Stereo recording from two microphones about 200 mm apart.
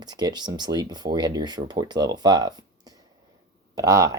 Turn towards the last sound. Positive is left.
turn(degrees=-15)  # may be behind; listen again after turning